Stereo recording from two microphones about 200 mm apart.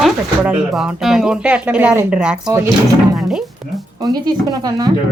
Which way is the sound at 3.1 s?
Centre (ahead or behind).